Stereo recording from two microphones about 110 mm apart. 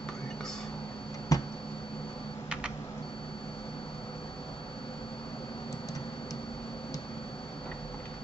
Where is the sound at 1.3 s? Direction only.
30° left (ahead or behind).